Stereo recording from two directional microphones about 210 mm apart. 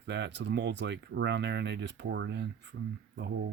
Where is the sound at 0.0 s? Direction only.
55° right (ahead or behind).